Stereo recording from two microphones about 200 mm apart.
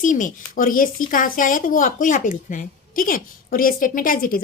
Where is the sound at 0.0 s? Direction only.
40° left (ahead or behind).